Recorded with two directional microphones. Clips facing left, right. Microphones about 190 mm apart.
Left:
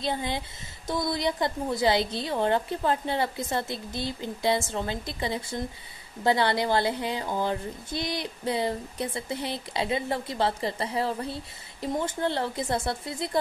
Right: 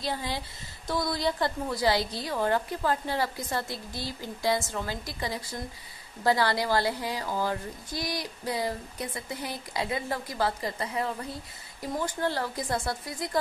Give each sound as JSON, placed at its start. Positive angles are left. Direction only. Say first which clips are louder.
{"t": 0.0, "sound": "speech", "louder": "left 3 dB", "side_deg": 20}